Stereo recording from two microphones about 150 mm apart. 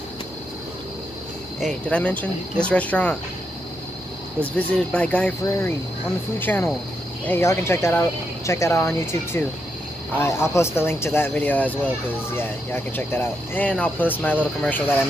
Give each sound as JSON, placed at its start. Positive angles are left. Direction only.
{"t": 1.9, "sound": "speech", "side_deg": 10}
{"t": 4.6, "sound": "speech", "side_deg": 10}